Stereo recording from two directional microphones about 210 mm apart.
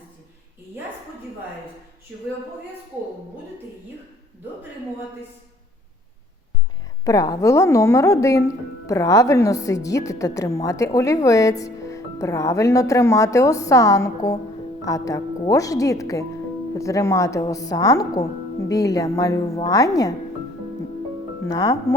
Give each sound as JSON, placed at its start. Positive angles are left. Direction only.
{"t": 7.0, "sound": "speech", "side_deg": 15}
{"t": 21.4, "sound": "speech", "side_deg": 15}